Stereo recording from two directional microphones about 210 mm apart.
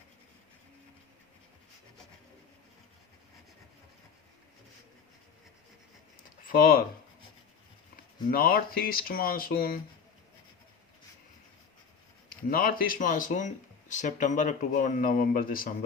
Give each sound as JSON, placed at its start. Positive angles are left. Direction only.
{"t": 6.4, "sound": "speech", "side_deg": 40}
{"t": 8.3, "sound": "speech", "side_deg": 45}
{"t": 12.3, "sound": "speech", "side_deg": 45}